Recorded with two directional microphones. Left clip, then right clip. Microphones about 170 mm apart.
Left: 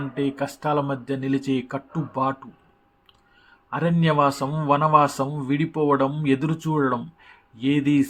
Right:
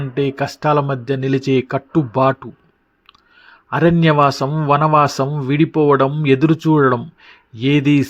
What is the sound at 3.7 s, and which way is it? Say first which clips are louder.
A man's voice: right 9 dB; 45° right (ahead or behind).